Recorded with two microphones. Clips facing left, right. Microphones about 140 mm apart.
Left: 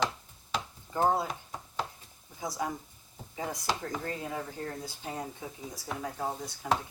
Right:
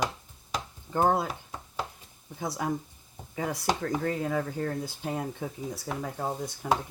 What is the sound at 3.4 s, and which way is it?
Speech, 80° right.